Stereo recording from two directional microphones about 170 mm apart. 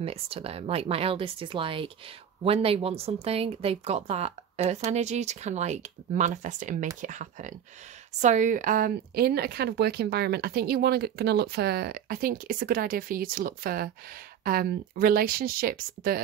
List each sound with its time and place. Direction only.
0.0 s speech: 35° right (ahead or behind); by 16.2 s 60° right (ahead or behind)